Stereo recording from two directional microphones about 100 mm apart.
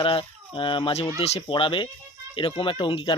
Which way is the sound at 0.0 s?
60° left (ahead or behind).